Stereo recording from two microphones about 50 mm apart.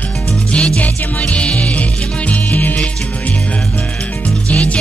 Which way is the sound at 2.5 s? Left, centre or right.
Left.